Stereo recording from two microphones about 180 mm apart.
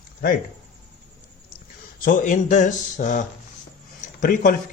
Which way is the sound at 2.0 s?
45° left (ahead or behind).